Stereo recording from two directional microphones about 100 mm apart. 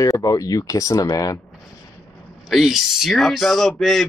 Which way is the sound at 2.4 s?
Centre (ahead or behind).